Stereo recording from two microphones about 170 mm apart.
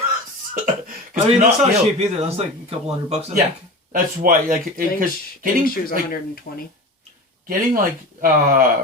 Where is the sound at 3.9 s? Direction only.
55° right (ahead or behind).